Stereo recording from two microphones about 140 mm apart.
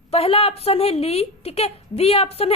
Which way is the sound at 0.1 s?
45° left (ahead or behind).